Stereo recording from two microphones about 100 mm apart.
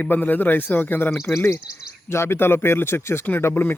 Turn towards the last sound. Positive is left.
turn(degrees=25)  # may be behind; listen again after turning